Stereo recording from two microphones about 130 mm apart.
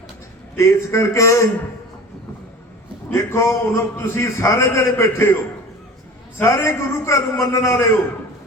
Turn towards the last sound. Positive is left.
turn(degrees=20)  # may be behind; listen again after turning